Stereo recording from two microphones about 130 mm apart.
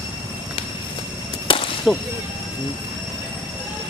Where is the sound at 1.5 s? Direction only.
45° left (ahead or behind).